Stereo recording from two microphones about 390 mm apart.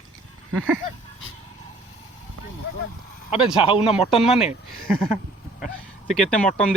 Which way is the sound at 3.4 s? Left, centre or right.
Centre.